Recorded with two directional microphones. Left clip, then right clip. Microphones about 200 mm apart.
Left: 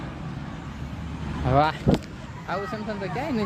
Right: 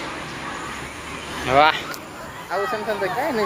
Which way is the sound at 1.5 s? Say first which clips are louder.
Right 6 dB; 25° left (ahead or behind).